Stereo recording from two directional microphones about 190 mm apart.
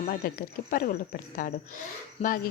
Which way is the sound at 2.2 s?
30° left (ahead or behind).